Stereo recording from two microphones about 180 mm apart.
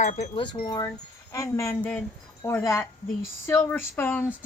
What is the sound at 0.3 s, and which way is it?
Wind chime, 25° left (ahead or behind).